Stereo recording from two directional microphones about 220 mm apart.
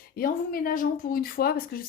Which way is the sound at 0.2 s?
40° left (ahead or behind).